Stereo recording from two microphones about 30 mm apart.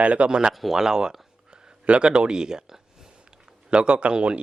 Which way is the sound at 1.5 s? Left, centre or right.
Right.